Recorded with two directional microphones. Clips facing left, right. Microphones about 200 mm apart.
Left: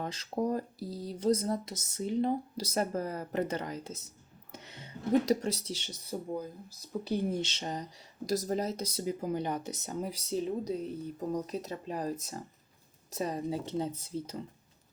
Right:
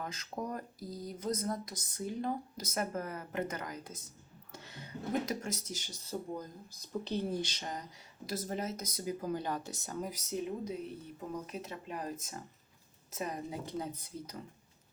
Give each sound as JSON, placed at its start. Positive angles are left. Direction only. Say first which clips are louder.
{"t": 0.0, "sound": "speech", "louder": "left 7 dB", "side_deg": 35}
{"t": 4.5, "sound": "a sound", "louder": "left 1 dB", "side_deg": 20}
{"t": 5.2, "sound": "speech", "louder": "left 8 dB", "side_deg": 35}
{"t": 5.9, "sound": "speech", "louder": "left 3 dB", "side_deg": 10}